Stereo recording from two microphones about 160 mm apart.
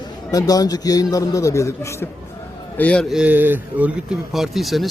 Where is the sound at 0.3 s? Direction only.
20° left (ahead or behind).